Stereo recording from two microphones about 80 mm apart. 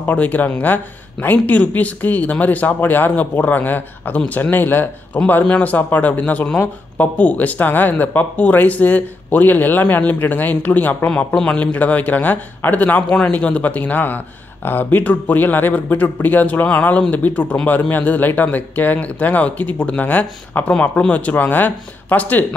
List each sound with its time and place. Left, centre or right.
0.0 s speech: centre
11.1 s speech: centre